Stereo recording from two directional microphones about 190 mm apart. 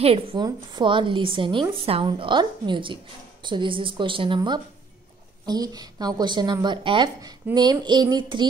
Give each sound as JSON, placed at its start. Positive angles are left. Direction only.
{"t": 0.0, "sound": "a woman's voice", "side_deg": -30}